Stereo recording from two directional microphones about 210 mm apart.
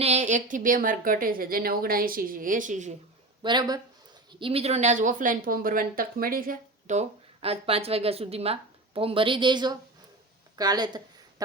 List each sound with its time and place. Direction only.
0.0 s speech: 30° right (ahead or behind)
3.4 s speech: 20° right (ahead or behind)